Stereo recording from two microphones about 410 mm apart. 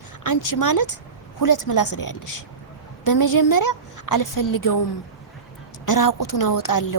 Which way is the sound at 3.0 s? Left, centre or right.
Left.